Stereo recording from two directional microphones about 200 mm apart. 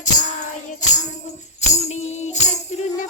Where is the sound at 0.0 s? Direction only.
40° left (ahead or behind).